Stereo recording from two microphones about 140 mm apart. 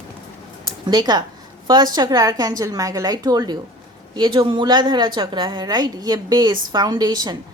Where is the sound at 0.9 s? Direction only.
30° right (ahead or behind).